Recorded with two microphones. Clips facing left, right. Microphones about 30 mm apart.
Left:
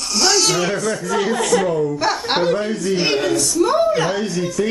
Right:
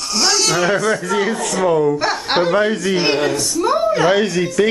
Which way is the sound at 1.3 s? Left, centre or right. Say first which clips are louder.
Left 4 dB; left.